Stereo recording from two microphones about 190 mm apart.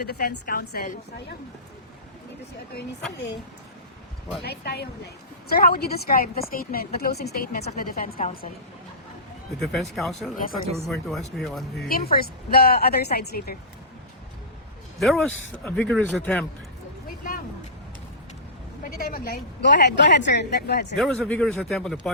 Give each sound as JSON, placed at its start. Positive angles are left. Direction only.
{"t": 0.0, "sound": "a woman's voice", "side_deg": 55}
{"t": 4.4, "sound": "a woman's voice", "side_deg": 60}
{"t": 9.6, "sound": "speech", "side_deg": 0}
{"t": 11.9, "sound": "a woman's voice", "side_deg": 50}
{"t": 14.9, "sound": "a man's voice", "side_deg": 0}
{"t": 18.8, "sound": "a woman's voice", "side_deg": 50}
{"t": 20.9, "sound": "speech", "side_deg": 5}